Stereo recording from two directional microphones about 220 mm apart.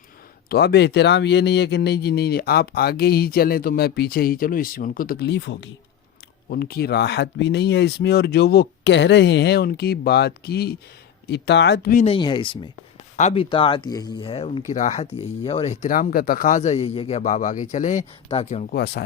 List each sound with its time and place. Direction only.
0.4 s speech: 50° left (ahead or behind)
12.0 s speech: 20° left (ahead or behind)
18.7 s speech: 45° left (ahead or behind)